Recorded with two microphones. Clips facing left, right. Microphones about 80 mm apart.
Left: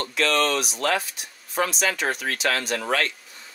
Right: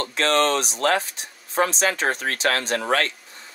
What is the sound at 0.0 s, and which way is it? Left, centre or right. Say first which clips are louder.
Speech: right 2 dB; right.